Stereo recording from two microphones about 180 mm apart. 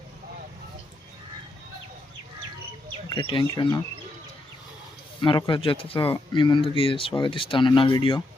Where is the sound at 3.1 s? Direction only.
30° left (ahead or behind).